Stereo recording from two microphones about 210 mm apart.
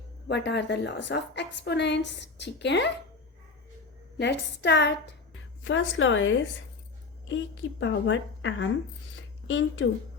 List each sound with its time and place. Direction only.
0.3 s a woman's voice: 55° left (ahead or behind)
4.2 s a woman's voice: 55° left (ahead or behind)